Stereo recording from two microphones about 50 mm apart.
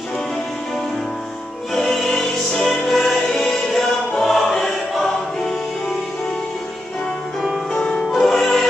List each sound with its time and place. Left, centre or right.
1.7 s music: centre
7.7 s music: centre
8.1 s music: centre